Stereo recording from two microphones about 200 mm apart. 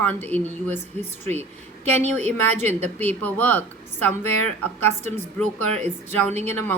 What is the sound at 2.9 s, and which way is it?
Speech, 10° left (ahead or behind).